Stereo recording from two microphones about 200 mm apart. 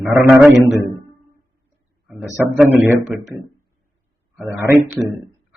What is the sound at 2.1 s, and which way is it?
Speech, 5° right (ahead or behind).